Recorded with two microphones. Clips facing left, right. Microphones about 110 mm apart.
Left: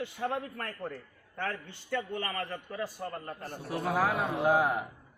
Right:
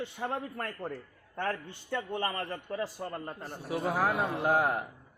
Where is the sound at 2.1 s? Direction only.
30° right (ahead or behind).